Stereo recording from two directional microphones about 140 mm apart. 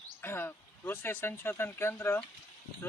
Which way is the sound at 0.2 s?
15° left (ahead or behind).